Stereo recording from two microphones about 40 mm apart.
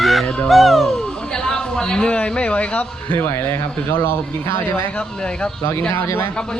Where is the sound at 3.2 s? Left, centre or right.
Left.